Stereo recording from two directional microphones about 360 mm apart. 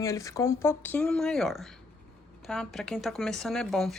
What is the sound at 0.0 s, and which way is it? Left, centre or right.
Speech, centre.